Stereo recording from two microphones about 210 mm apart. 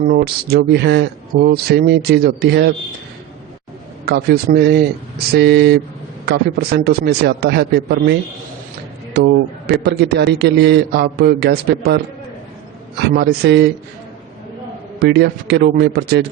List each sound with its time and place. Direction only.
0.0 s speech: 50° right (ahead or behind)
4.0 s speech: 50° right (ahead or behind)
9.1 s speech: 50° right (ahead or behind)
13.0 s speech: 50° right (ahead or behind)
14.9 s speech: 50° right (ahead or behind)